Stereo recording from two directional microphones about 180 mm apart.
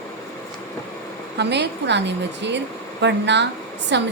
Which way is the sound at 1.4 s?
70° right (ahead or behind).